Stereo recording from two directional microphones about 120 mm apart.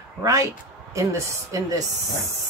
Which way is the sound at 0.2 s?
25° right (ahead or behind).